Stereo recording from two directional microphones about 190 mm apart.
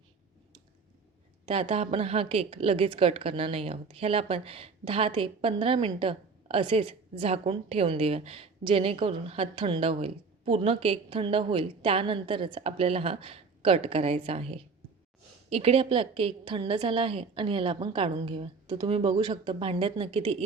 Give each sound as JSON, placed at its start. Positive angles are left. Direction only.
{"t": 1.5, "sound": "a woman's voice", "side_deg": -30}